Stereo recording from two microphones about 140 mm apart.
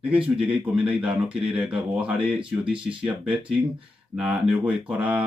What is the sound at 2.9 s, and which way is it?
Speech, 40° right (ahead or behind).